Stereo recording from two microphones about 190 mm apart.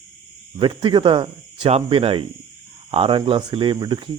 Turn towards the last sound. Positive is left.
turn(degrees=-25)  # may be behind; listen again after turning